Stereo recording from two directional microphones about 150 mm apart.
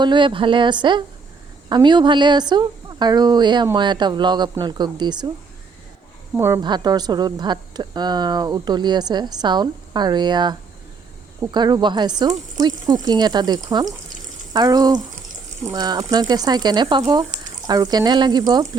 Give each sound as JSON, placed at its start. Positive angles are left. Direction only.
{"t": 0.0, "sound": "speech", "side_deg": -30}
{"t": 6.3, "sound": "speech", "side_deg": -15}
{"t": 6.6, "sound": "speech", "side_deg": -30}